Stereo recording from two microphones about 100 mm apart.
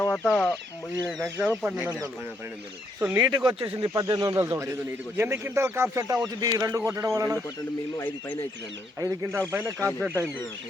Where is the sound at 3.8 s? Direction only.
40° right (ahead or behind).